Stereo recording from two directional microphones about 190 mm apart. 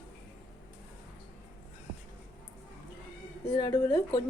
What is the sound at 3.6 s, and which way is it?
Speech, 20° left (ahead or behind).